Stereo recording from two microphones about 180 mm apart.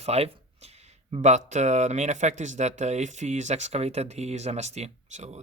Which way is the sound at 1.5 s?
40° right (ahead or behind).